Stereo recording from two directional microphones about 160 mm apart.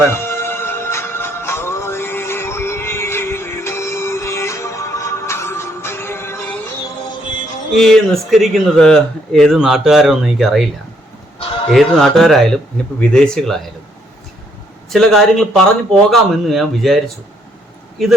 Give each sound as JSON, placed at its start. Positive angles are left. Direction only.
{"t": 0.1, "sound": "music", "side_deg": 15}
{"t": 7.8, "sound": "speech", "side_deg": 0}
{"t": 11.3, "sound": "a sound", "side_deg": 35}
{"t": 11.9, "sound": "speech", "side_deg": 0}
{"t": 14.8, "sound": "speech", "side_deg": 0}
{"t": 18.0, "sound": "speech", "side_deg": 0}